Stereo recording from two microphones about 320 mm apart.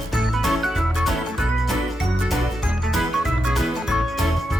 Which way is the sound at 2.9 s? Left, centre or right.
Centre.